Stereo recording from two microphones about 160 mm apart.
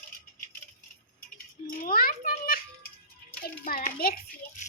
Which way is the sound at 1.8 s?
65° left (ahead or behind).